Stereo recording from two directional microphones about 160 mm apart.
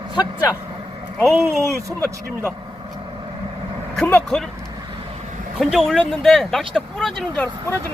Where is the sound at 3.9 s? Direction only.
5° left (ahead or behind).